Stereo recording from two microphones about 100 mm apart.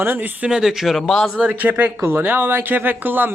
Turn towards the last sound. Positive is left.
turn(degrees=-20)  # may be behind; listen again after turning